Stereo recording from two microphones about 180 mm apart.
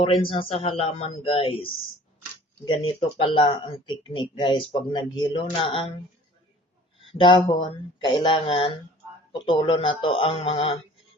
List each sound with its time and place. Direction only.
0.0 s speech: 30° left (ahead or behind)
7.1 s speech: 30° left (ahead or behind)